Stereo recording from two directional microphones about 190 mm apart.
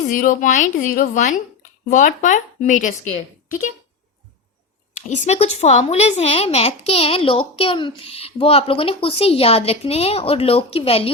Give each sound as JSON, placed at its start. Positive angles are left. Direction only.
{"t": 0.1, "sound": "a woman's voice", "side_deg": 45}
{"t": 5.0, "sound": "speech", "side_deg": 35}